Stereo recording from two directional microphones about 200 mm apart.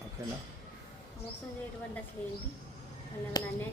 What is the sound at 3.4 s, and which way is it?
Speech, 20° left (ahead or behind).